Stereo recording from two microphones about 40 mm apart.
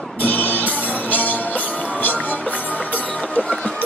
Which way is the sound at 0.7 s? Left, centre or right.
Left.